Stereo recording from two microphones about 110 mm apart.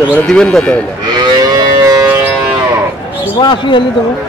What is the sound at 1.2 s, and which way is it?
Livestock, 35° right (ahead or behind).